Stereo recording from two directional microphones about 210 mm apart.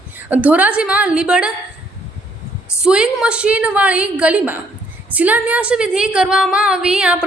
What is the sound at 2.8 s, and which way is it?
A woman's voice, 5° right (ahead or behind).